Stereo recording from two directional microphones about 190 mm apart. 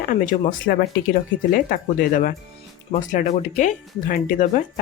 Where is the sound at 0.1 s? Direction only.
45° left (ahead or behind).